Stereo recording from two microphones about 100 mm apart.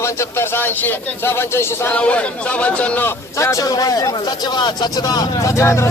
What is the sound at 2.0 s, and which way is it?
Speech, 10° left (ahead or behind).